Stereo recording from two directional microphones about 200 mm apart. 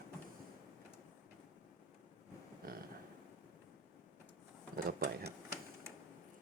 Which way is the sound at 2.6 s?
45° right (ahead or behind).